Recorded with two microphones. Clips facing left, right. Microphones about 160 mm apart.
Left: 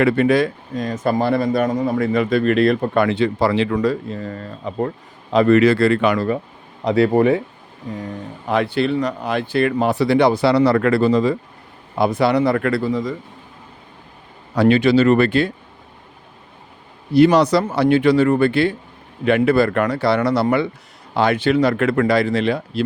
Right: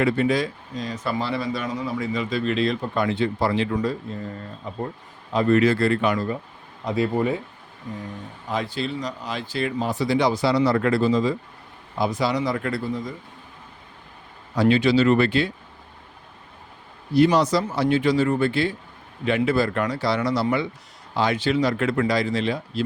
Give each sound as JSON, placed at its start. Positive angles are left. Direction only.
{"t": 0.0, "sound": "speech", "side_deg": 65}
{"t": 5.3, "sound": "speech", "side_deg": 80}
{"t": 8.4, "sound": "speech", "side_deg": 65}
{"t": 14.5, "sound": "speech", "side_deg": 60}
{"t": 17.2, "sound": "speech", "side_deg": 70}